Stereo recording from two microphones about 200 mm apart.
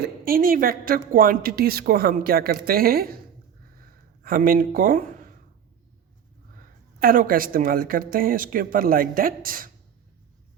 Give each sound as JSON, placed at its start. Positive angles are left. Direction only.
{"t": 0.0, "sound": "a woman's voice", "side_deg": -45}
{"t": 4.2, "sound": "speech", "side_deg": -45}
{"t": 7.0, "sound": "a woman's voice", "side_deg": -45}